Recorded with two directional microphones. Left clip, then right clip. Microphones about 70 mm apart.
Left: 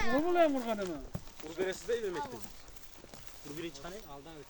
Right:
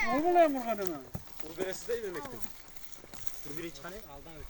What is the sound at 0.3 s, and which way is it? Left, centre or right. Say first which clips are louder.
Speech: right 4 dB; centre.